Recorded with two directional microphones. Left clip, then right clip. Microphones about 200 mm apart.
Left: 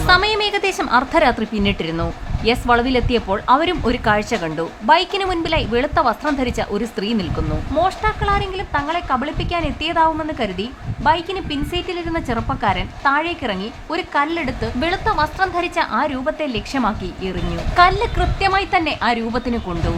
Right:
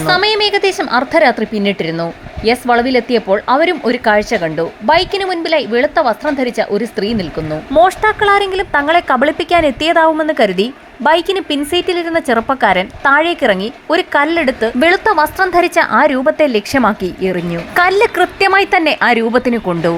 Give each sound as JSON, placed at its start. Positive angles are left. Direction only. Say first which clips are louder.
{"t": 0.0, "sound": "a woman's voice", "louder": "right 3 dB", "side_deg": -15}
{"t": 7.8, "sound": "a woman's voice", "louder": "right 9 dB", "side_deg": -30}